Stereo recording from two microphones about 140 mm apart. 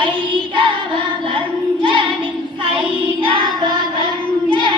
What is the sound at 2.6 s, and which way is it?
Child singing, 35° right (ahead or behind).